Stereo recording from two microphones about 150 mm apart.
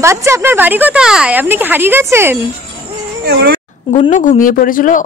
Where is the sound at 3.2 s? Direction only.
90° right.